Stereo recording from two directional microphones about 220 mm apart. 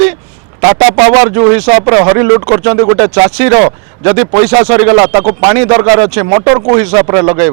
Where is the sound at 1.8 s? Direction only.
20° right (ahead or behind).